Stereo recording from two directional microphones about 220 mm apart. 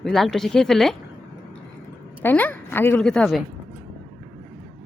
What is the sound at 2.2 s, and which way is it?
A woman's voice, 10° left (ahead or behind).